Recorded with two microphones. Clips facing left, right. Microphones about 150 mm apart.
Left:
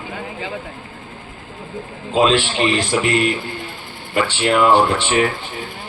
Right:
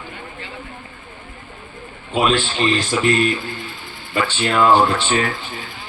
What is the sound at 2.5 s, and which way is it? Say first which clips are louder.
Speech: left 1 dB; 75° left (ahead or behind).